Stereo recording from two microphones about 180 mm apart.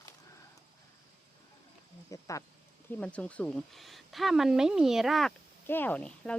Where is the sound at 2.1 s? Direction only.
20° left (ahead or behind).